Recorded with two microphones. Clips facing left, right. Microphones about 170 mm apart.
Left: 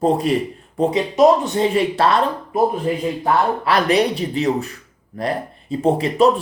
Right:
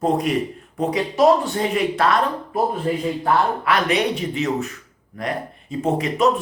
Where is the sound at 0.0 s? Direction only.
30° left (ahead or behind).